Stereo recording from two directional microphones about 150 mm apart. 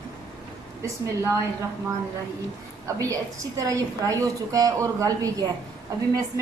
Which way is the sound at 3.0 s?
20° right (ahead or behind).